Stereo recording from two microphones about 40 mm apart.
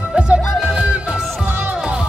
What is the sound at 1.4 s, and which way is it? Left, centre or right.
Music, right.